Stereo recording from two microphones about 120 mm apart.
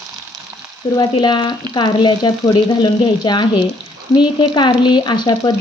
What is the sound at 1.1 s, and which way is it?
Speech, 40° left (ahead or behind).